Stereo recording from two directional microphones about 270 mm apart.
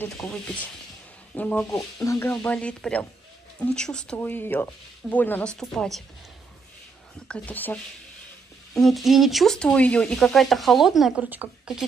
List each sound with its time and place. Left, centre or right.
0.0 s speech: centre
7.2 s speech: centre